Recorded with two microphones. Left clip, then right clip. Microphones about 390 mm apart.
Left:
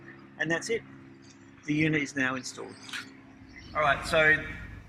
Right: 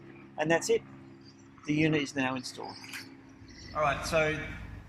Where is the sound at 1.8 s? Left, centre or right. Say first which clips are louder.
Left 2 dB; right.